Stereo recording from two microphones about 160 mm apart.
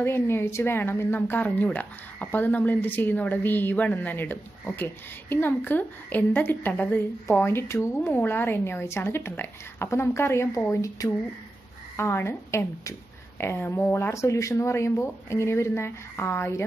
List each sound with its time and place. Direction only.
0.0 s a woman's voice: 15° left (ahead or behind)